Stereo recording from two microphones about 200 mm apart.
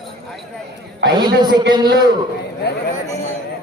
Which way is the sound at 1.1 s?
20° right (ahead or behind).